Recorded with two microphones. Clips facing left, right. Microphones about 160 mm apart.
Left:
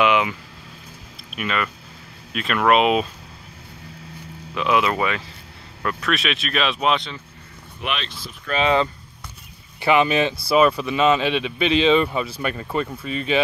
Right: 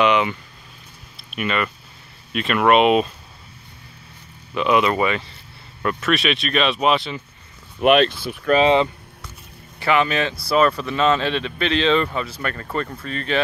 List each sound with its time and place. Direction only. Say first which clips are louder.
0.0 s vehicle: right 1 dB; 5° left (ahead or behind)
1.3 s speech: right 2 dB; centre (ahead or behind)
4.6 s speech: right 2 dB; centre (ahead or behind)
7.8 s speech: right 14 dB; 50° right (ahead or behind)
9.8 s speech: left 2 dB; 15° left (ahead or behind)